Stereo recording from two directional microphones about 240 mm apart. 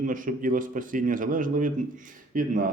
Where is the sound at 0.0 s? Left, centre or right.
Right.